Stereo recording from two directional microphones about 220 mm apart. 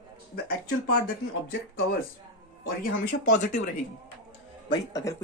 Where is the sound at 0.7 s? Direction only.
45° left (ahead or behind).